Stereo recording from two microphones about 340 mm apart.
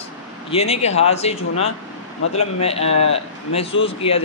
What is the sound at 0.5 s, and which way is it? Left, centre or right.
Speech, centre.